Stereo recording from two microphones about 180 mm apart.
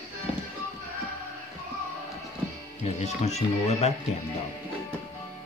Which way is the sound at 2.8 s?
35° left (ahead or behind).